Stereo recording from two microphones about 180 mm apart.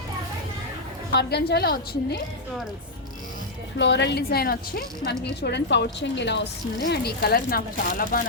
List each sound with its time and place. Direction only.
1.1 s a woman's voice: 65° left (ahead or behind)
3.8 s a woman's voice: 75° left (ahead or behind)
5.4 s speech: 70° left (ahead or behind); by 8.3 s 55° left (ahead or behind)